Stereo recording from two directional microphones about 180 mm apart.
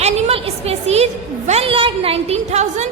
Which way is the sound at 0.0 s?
35° right (ahead or behind).